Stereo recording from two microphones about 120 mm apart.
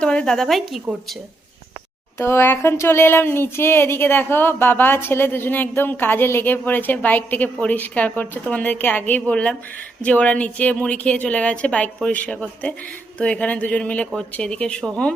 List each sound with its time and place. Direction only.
0.0 s a woman's voice: 10° left (ahead or behind)
0.9 s speech: 10° right (ahead or behind)
2.1 s speech: 20° left (ahead or behind)